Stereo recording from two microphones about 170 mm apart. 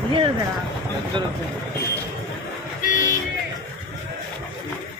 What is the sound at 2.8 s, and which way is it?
Vehicle, 50° left (ahead or behind).